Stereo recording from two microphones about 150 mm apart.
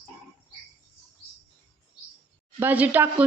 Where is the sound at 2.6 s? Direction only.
10° right (ahead or behind).